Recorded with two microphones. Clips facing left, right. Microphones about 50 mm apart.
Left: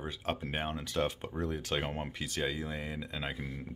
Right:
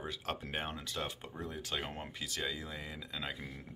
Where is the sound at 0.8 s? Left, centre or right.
Left.